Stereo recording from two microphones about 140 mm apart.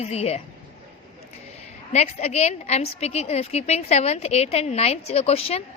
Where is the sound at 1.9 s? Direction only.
50° left (ahead or behind).